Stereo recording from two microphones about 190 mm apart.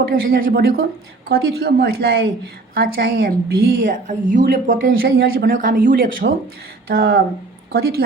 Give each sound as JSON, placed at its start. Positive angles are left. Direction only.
{"t": 0.0, "sound": "a woman's voice", "side_deg": -50}
{"t": 3.8, "sound": "a woman's voice", "side_deg": -40}